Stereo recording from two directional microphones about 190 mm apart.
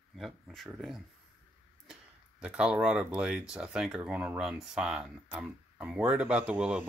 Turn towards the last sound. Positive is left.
turn(degrees=-10)  # may be behind; listen again after turning